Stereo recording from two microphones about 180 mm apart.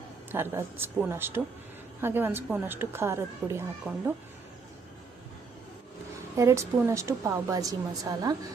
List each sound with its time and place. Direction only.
0.3 s a woman's voice: 10° right (ahead or behind)
6.3 s a woman's voice: 15° right (ahead or behind)